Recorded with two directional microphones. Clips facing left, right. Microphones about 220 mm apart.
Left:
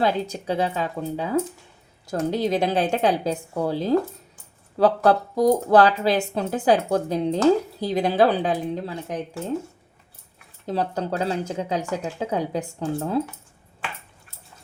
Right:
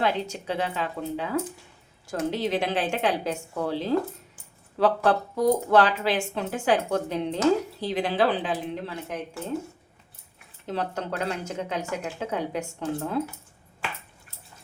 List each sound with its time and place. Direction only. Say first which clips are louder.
0.0 s speech: left 3 dB; 40° left (ahead or behind)
10.7 s speech: left 4 dB; 35° left (ahead or behind)